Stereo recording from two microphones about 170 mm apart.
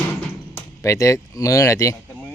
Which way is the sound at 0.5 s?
20° left (ahead or behind).